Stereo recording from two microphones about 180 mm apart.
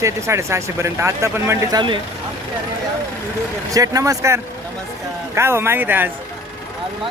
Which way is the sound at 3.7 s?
20° right (ahead or behind).